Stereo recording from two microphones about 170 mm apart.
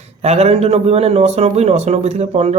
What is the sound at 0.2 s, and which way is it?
A man's voice, 35° right (ahead or behind).